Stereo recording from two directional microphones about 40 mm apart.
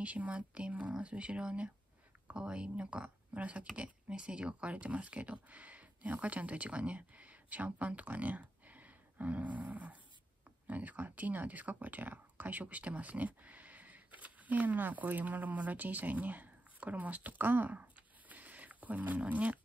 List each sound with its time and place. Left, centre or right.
0.0 s speech: right